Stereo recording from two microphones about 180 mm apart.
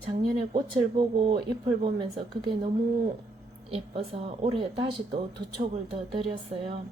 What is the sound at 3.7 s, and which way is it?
A woman's voice, 30° right (ahead or behind).